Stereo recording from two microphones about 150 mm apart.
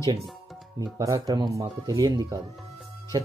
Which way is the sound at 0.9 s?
25° right (ahead or behind).